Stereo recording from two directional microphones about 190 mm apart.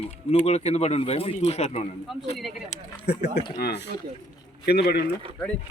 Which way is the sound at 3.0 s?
60° left (ahead or behind).